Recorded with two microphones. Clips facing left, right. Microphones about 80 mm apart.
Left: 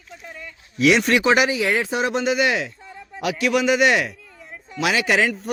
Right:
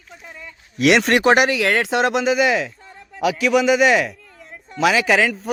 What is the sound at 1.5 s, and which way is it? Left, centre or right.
Speech, right.